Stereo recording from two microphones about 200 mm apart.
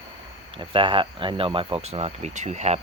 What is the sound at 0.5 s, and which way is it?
Speech, 25° right (ahead or behind).